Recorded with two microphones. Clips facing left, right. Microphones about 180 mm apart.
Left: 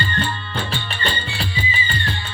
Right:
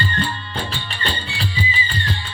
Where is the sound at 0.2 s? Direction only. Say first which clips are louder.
Even; 35° right (ahead or behind).